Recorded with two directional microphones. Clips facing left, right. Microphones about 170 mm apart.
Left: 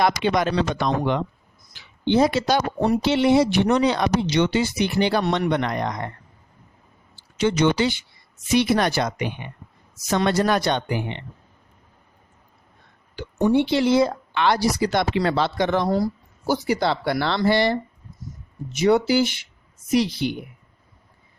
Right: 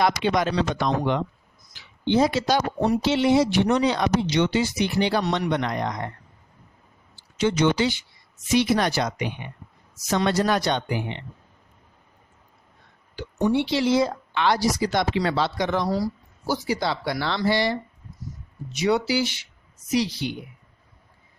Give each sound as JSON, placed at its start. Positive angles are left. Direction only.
{"t": 0.0, "sound": "speech", "side_deg": 55}
{"t": 7.3, "sound": "speech", "side_deg": 60}
{"t": 13.1, "sound": "speech", "side_deg": 50}